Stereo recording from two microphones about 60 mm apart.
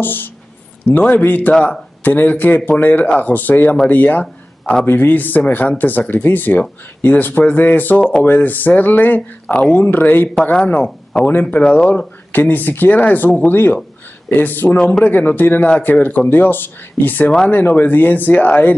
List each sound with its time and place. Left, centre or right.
0.0 s speech: left
1.5 s speech: left
10.4 s speech: left
12.3 s speech: left